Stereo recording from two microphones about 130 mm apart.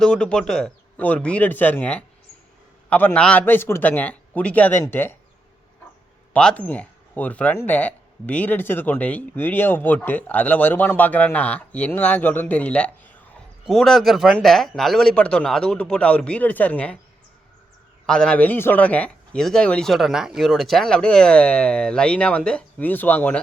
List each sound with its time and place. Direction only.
0.0 s speech: 5° left (ahead or behind)
6.3 s speech: 10° left (ahead or behind)
18.0 s speech: 5° left (ahead or behind)